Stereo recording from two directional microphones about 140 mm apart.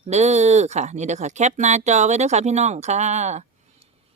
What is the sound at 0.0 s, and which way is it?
Speech, 50° right (ahead or behind).